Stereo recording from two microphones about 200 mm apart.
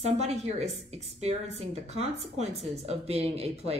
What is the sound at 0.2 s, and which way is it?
Speech, 35° right (ahead or behind).